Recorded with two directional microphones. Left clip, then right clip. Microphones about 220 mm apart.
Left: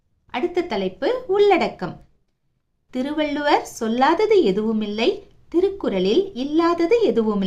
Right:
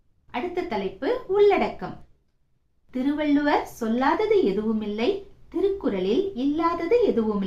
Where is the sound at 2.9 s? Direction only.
50° left (ahead or behind).